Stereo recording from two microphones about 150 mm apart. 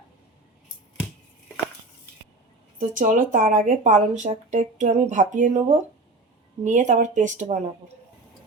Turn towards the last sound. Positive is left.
turn(degrees=-55)  # may be behind; listen again after turning